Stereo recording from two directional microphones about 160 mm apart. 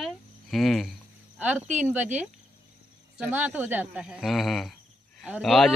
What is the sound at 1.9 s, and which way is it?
A man's voice, 10° right (ahead or behind).